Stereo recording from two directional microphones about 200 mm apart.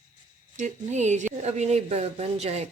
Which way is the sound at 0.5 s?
35° right (ahead or behind).